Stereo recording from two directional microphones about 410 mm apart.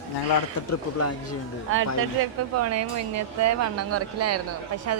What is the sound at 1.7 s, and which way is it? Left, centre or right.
Speech, right.